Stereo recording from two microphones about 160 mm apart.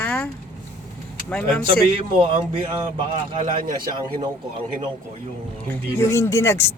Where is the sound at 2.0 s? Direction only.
35° right (ahead or behind).